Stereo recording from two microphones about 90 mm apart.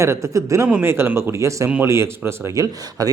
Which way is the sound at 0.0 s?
35° right (ahead or behind).